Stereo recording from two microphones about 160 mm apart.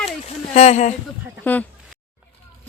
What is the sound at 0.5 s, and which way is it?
Speech, 45° left (ahead or behind).